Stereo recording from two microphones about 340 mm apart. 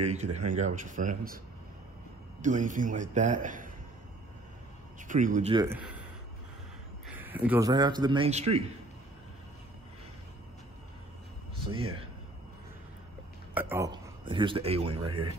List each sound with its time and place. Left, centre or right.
0.0 s a man's voice: centre
2.4 s a man's voice: right
5.0 s speech: right; by 6.0 s centre
7.2 s a man's voice: centre
11.7 s a man's voice: centre
13.6 s a man's voice: centre